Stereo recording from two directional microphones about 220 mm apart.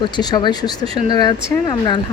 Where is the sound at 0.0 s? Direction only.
20° left (ahead or behind).